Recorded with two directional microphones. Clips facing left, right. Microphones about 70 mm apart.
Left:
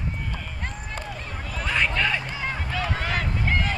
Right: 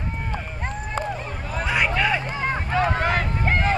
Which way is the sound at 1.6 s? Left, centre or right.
Centre.